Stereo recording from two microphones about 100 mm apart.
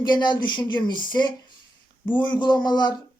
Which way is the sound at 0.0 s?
50° left (ahead or behind).